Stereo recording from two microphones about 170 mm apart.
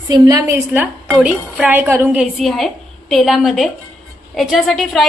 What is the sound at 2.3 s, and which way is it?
A woman's voice, centre (ahead or behind).